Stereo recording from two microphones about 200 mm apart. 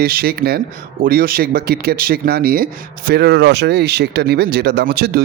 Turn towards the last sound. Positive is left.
turn(degrees=-50)  # may be behind; listen again after turning